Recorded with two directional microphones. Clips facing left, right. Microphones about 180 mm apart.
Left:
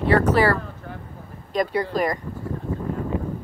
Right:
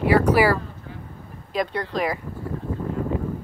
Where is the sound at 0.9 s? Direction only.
60° left (ahead or behind).